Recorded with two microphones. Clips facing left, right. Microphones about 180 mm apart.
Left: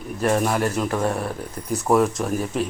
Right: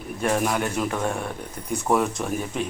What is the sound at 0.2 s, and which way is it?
Speech, centre (ahead or behind).